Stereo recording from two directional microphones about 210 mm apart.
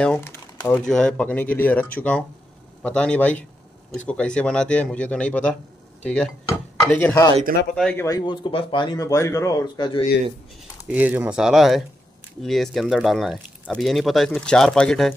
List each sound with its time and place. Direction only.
0.0 s speech: 10° left (ahead or behind)
10.9 s speech: 5° right (ahead or behind)